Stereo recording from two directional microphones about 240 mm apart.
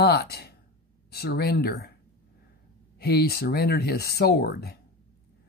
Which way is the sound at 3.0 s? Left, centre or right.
Left.